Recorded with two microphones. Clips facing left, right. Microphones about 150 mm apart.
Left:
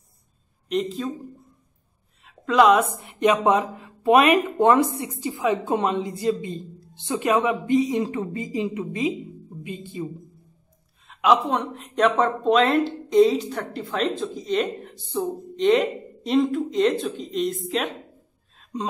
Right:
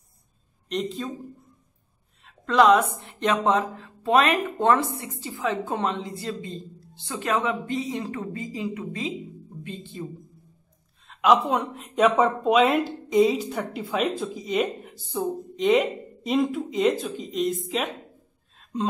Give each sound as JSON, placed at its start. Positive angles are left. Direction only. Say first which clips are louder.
{"t": 0.7, "sound": "a woman's voice", "louder": "left 4 dB", "side_deg": 0}
{"t": 2.2, "sound": "a woman's voice", "louder": "left 1 dB", "side_deg": 5}
{"t": 11.1, "sound": "a woman's voice", "louder": "even", "side_deg": 0}
{"t": 18.6, "sound": "gasp", "louder": "right 2 dB", "side_deg": 0}